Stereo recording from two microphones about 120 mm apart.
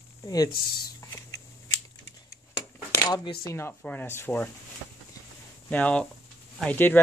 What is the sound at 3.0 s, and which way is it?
Speech, 35° left (ahead or behind).